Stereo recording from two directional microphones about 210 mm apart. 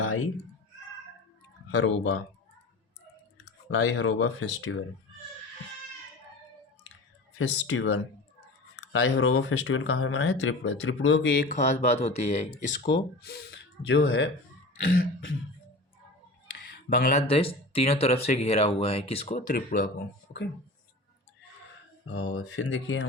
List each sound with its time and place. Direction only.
1.7 s speech: 65° left (ahead or behind)
3.4 s speech: 65° left (ahead or behind); by 4.9 s 80° left
7.3 s speech: 80° left; by 11.4 s 60° left (ahead or behind)
11.4 s speech: 35° left (ahead or behind)
12.5 s speech: 45° left (ahead or behind)
13.8 s speech: 70° left (ahead or behind)
16.6 s speech: 40° left (ahead or behind)
22.0 s speech: 90° left; by 23.0 s 65° left (ahead or behind)